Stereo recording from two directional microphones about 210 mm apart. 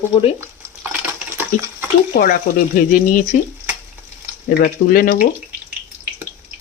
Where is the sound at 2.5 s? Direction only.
35° left (ahead or behind).